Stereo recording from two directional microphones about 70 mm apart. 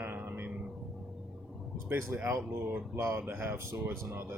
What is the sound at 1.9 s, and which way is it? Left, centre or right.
Speech, right.